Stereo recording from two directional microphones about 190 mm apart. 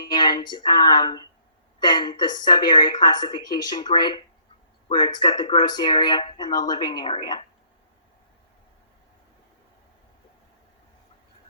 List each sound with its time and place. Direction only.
0.0 s speech: 25° left (ahead or behind)